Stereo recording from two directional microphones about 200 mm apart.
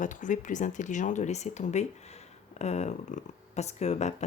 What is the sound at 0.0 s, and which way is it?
Speech, 40° left (ahead or behind).